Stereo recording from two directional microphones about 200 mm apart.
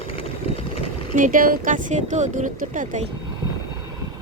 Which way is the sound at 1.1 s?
40° right (ahead or behind).